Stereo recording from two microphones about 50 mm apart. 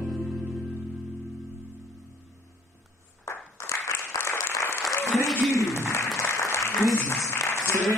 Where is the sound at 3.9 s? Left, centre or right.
Left.